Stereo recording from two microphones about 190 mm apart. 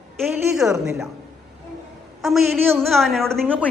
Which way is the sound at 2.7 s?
Centre (ahead or behind).